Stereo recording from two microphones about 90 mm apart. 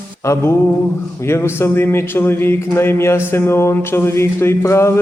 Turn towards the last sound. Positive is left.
turn(degrees=30)  # may be behind; listen again after turning